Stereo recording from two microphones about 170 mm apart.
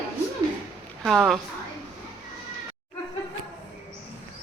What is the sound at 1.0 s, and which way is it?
Speech, centre (ahead or behind).